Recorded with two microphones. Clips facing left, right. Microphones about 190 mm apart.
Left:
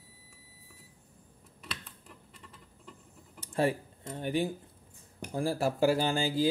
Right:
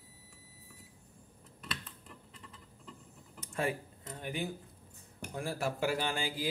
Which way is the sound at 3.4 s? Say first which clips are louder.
Left 6 dB; 30° left (ahead or behind).